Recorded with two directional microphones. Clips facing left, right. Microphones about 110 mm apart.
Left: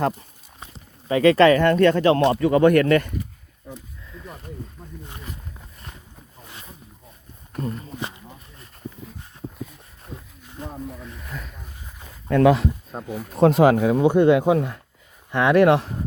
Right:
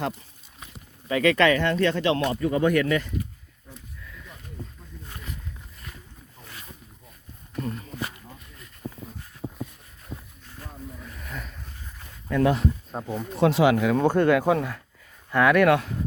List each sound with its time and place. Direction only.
0.6 s a sound: 30° left (ahead or behind)
1.6 s speech: 50° left (ahead or behind)
2.3 s speech: 75° left (ahead or behind)
7.6 s a sound: 30° left (ahead or behind)
10.6 s snake: 20° left (ahead or behind)
11.0 s a sound: centre (ahead or behind)
12.3 s speech: 90° left
13.4 s speech: 40° left (ahead or behind)
13.7 s speech: 15° left (ahead or behind)